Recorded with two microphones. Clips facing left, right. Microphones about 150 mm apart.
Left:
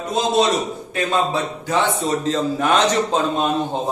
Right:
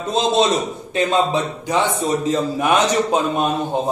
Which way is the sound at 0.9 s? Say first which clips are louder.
Right 3 dB; 20° right (ahead or behind).